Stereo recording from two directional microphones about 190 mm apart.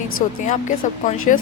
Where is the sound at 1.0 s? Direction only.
45° left (ahead or behind).